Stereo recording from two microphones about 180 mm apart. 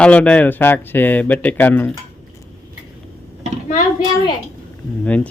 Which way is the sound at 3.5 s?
40° right (ahead or behind).